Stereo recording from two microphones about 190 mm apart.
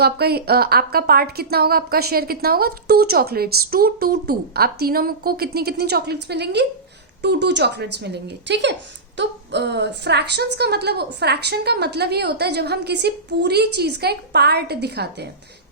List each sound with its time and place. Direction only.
0.0 s a woman's voice: 55° right (ahead or behind)